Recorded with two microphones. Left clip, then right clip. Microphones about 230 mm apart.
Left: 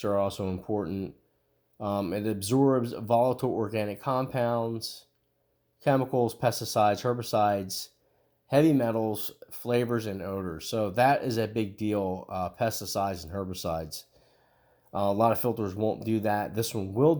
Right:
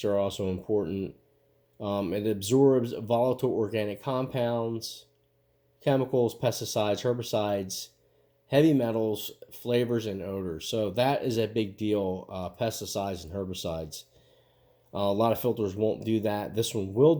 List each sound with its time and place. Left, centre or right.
0.0 s speech: centre